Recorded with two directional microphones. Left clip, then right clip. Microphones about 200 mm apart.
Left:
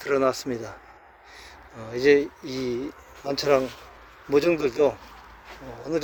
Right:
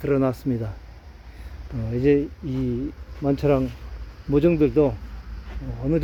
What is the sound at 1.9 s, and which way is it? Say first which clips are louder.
Speech: left 1 dB; 5° left (ahead or behind).